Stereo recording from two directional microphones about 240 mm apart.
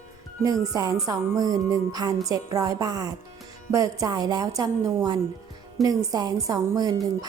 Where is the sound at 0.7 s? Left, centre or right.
Centre.